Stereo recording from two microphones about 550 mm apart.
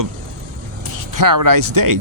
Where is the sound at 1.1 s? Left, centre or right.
Right.